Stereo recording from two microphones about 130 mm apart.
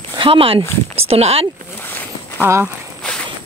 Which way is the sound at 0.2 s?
45° right (ahead or behind).